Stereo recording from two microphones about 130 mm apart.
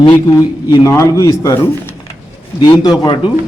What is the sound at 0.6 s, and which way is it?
A man's voice, 30° left (ahead or behind).